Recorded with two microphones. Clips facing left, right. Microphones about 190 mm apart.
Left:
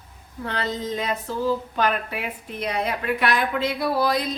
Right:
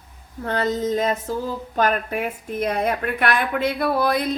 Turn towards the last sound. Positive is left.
turn(degrees=-55)  # may be behind; listen again after turning